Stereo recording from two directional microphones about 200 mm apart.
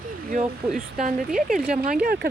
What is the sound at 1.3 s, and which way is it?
Speech, centre (ahead or behind).